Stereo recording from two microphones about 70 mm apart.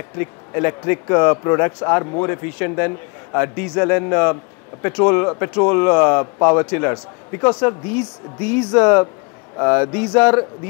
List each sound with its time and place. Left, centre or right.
0.2 s a man's voice: left